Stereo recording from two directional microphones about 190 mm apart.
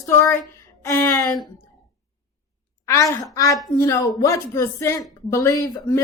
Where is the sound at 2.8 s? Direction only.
15° left (ahead or behind).